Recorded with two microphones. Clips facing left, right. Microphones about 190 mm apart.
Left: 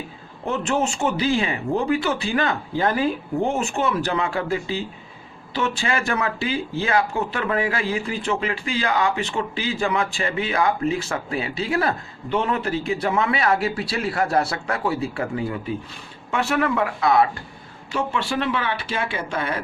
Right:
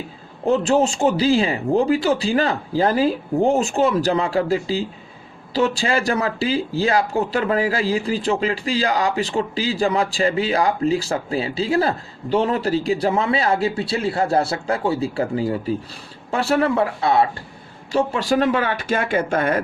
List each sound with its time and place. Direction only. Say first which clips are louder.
0.4 s speech: right 6 dB; 35° right (ahead or behind); by 19.5 s 50° right (ahead or behind)